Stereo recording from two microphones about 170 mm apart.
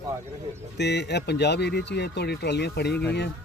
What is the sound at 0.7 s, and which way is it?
Speech, 80° left.